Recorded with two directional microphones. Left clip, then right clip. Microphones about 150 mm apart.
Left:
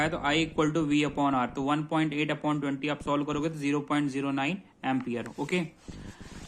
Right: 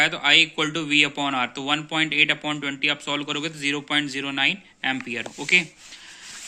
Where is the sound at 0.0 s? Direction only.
5° right (ahead or behind).